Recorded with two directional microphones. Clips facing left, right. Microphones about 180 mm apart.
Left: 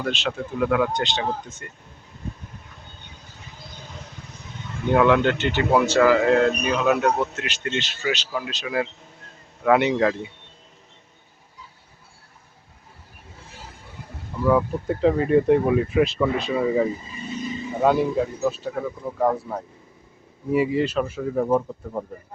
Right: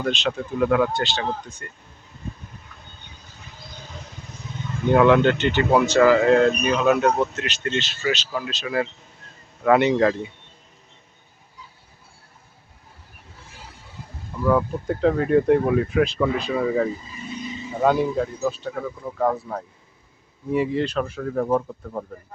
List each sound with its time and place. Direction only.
0.0 s speech: 5° left (ahead or behind)
0.9 s speech: 20° left (ahead or behind)
4.9 s speech: centre (ahead or behind)
14.4 s speech: 5° left (ahead or behind)